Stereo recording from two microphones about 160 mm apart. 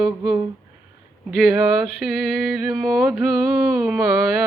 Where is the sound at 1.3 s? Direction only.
Centre (ahead or behind).